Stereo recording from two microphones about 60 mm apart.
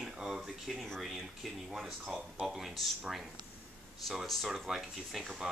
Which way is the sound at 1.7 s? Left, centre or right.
Centre.